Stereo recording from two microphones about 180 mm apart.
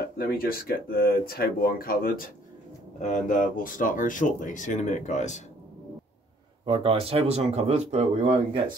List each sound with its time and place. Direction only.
0.2 s speech: 55° left (ahead or behind)
6.6 s speech: 30° right (ahead or behind)